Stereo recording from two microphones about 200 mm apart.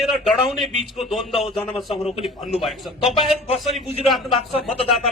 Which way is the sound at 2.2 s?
Centre (ahead or behind).